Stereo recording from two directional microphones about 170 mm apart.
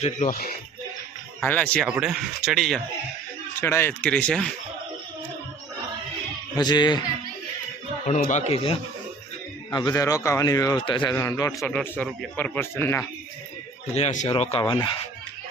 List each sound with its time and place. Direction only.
1.4 s speech: 10° left (ahead or behind)
1.8 s speech: 5° right (ahead or behind)
3.6 s speech: 15° left (ahead or behind)
6.6 s a man's voice: 25° left (ahead or behind)
8.0 s speech: 45° left (ahead or behind)
9.7 s a man's voice: 20° left (ahead or behind)
11.2 s speech: 15° left (ahead or behind)
11.7 s speech: 5° left (ahead or behind)
13.9 s speech: 40° left (ahead or behind)
14.6 s a man's voice: 25° left (ahead or behind)